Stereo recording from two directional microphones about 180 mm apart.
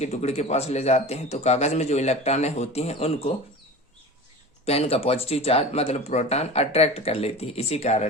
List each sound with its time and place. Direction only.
0.0 s speech: 35° left (ahead or behind)
4.6 s speech: 35° left (ahead or behind)